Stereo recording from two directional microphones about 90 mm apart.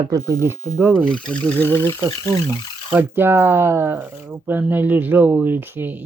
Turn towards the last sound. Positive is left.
turn(degrees=-20)  # may be behind; listen again after turning